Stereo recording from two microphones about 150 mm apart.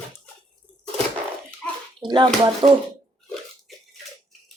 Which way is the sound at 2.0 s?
35° right (ahead or behind).